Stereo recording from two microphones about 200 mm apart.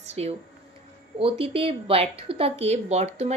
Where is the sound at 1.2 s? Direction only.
25° right (ahead or behind).